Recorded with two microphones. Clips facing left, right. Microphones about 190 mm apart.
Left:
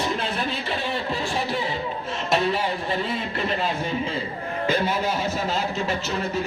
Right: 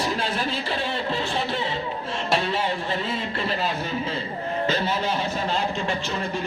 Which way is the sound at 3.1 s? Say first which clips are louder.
Left 1 dB; 30° right (ahead or behind).